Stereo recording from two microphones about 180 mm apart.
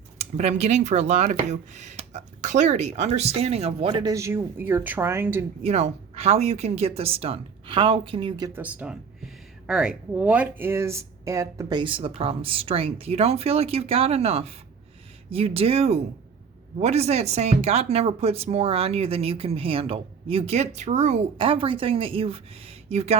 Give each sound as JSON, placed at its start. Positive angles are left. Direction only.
{"t": 0.2, "sound": "speech", "side_deg": -35}
{"t": 5.6, "sound": "speech", "side_deg": -35}
{"t": 8.5, "sound": "speech", "side_deg": -10}